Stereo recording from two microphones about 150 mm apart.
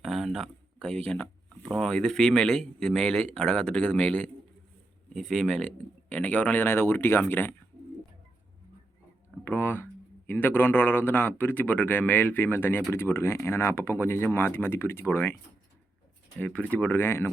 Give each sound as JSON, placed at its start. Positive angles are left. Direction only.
{"t": 0.0, "sound": "speech", "side_deg": 0}
{"t": 9.4, "sound": "speech", "side_deg": 15}
{"t": 16.4, "sound": "speech", "side_deg": 10}